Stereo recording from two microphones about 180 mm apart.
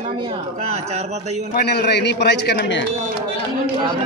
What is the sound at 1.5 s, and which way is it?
A man's voice, 60° left (ahead or behind).